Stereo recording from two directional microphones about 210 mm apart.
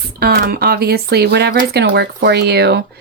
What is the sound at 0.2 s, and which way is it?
Speech, 45° right (ahead or behind).